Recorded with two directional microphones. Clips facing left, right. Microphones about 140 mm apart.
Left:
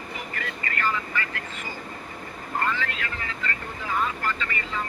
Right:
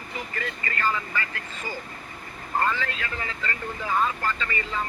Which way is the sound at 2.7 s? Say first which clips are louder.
Even; 30° right (ahead or behind).